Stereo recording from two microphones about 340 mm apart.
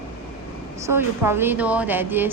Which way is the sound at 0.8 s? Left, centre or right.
Centre.